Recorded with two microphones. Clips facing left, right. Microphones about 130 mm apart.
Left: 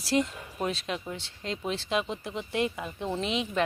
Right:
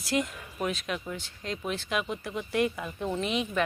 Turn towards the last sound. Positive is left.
turn(degrees=25)  # may be behind; listen again after turning